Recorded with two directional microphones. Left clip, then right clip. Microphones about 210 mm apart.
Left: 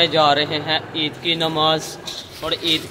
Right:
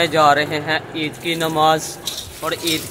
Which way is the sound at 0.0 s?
5° right (ahead or behind).